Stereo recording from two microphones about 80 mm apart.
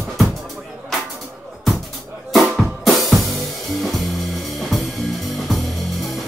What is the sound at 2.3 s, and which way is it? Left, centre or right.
Drum kit, centre.